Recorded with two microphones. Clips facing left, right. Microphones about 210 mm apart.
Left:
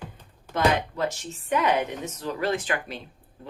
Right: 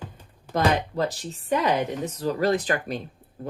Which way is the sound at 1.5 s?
35° right (ahead or behind).